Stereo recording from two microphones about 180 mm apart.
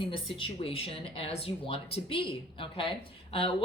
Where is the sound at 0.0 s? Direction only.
30° left (ahead or behind).